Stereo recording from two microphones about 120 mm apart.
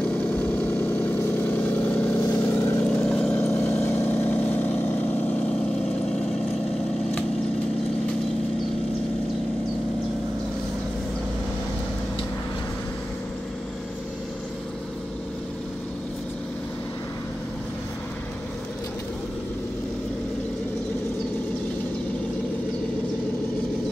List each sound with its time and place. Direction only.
0.0 s vehicle: 15° left (ahead or behind)
3.1 s vehicle: 10° left (ahead or behind)
5.9 s vehicle: 5° left (ahead or behind)